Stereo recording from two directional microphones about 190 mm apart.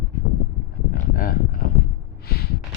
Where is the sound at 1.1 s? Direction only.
50° left (ahead or behind).